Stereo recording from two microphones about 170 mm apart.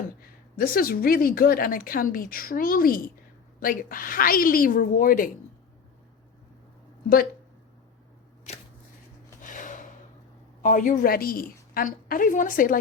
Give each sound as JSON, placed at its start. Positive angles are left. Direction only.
{"t": 0.5, "sound": "a woman's voice", "side_deg": 60}
{"t": 8.5, "sound": "shuffling cards", "side_deg": 40}
{"t": 9.4, "sound": "a sound", "side_deg": 50}
{"t": 10.6, "sound": "a woman's voice", "side_deg": 50}